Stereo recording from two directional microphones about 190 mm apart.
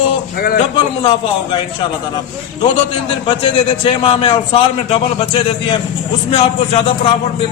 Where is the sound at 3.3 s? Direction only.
25° left (ahead or behind).